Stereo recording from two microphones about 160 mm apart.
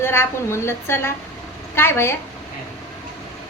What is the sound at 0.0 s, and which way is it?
A woman's voice, 15° left (ahead or behind).